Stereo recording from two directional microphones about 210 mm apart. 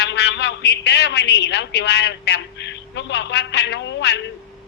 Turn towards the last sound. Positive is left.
turn(degrees=55)  # may be behind; listen again after turning